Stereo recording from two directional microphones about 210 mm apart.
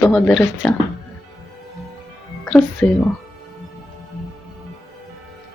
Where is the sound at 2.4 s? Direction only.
10° left (ahead or behind).